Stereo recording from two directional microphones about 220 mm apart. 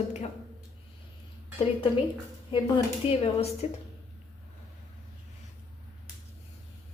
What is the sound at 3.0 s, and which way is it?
Speech, 25° left (ahead or behind).